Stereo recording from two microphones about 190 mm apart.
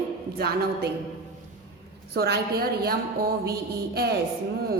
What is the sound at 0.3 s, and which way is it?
Speech, 55° right (ahead or behind).